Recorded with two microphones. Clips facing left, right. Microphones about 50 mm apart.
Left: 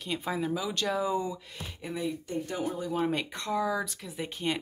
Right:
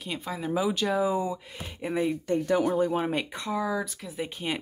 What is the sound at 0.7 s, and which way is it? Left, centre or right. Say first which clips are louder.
Speech: right 3 dB; centre.